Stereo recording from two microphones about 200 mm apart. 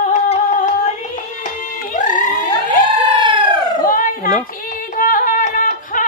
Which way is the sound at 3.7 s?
45° left (ahead or behind).